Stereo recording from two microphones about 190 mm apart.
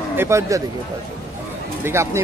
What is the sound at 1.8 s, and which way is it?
Speech, 15° right (ahead or behind).